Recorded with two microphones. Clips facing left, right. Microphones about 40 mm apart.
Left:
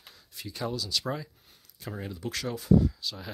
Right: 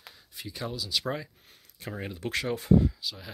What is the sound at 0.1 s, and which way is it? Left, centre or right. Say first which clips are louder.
Speech: left 1 dB; centre.